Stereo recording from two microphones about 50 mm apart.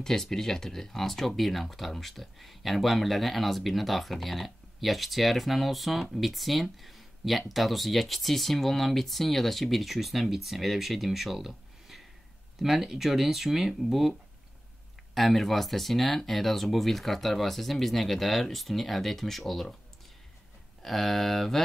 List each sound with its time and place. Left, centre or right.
0.0 s speech: centre
15.1 s speech: centre
20.8 s speech: centre